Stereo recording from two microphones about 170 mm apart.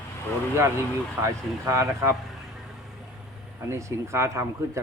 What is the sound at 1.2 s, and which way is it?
Speech, 20° right (ahead or behind).